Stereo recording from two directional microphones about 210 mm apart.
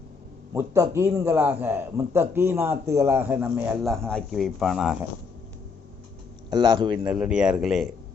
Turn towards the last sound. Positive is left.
turn(degrees=0)  # may be behind; listen again after turning